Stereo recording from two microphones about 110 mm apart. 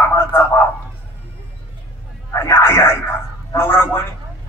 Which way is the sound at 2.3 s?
20° left (ahead or behind).